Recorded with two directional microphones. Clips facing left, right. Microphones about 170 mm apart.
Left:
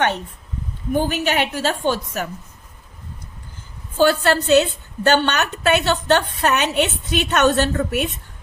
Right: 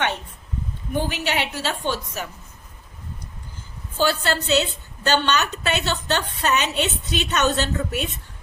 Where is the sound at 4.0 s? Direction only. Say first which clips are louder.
Left 6 dB; 50° left (ahead or behind).